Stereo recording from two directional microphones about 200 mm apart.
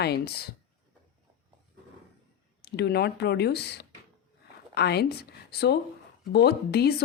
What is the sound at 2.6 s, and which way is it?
Speech, 55° left (ahead or behind).